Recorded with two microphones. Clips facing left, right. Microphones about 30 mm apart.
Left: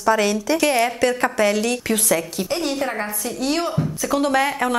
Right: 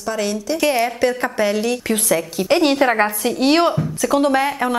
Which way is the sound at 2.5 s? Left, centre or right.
Right.